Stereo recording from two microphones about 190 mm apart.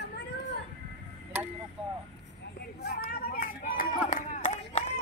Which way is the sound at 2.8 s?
50° left (ahead or behind).